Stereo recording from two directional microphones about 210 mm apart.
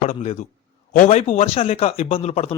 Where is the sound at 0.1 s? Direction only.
35° left (ahead or behind).